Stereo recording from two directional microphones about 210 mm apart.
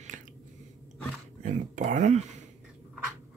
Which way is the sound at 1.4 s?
35° right (ahead or behind).